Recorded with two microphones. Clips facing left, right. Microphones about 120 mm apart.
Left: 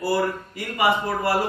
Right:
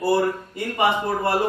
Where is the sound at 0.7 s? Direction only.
20° right (ahead or behind).